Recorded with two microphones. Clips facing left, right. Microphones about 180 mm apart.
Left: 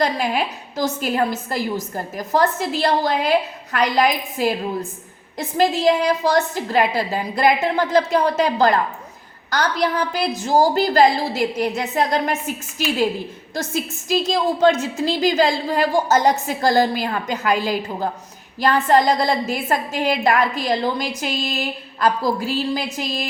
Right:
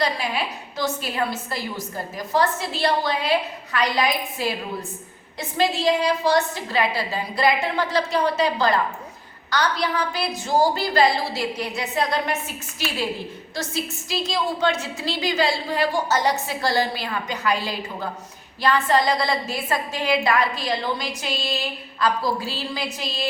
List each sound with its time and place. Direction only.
0.0 s a woman's voice: 45° left (ahead or behind)
5.5 s a woman's voice: 45° left (ahead or behind)
13.6 s a woman's voice: 45° left (ahead or behind)